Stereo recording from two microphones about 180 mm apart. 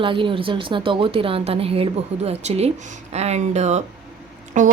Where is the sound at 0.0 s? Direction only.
30° right (ahead or behind).